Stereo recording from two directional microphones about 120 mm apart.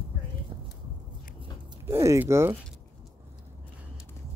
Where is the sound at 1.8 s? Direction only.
25° right (ahead or behind).